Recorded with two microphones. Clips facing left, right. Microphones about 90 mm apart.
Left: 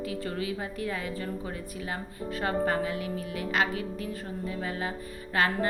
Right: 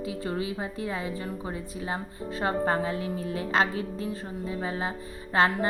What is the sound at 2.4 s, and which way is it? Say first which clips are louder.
Speech: right 2 dB; 30° right (ahead or behind).